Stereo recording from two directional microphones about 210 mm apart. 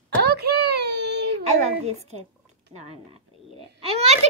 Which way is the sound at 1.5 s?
30° right (ahead or behind).